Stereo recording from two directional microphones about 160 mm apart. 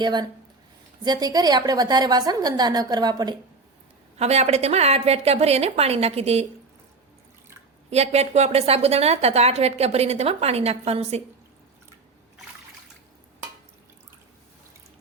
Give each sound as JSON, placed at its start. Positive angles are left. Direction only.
{"t": 0.0, "sound": "a woman's voice", "side_deg": -25}
{"t": 4.2, "sound": "a woman's voice", "side_deg": -40}
{"t": 7.9, "sound": "a woman's voice", "side_deg": -40}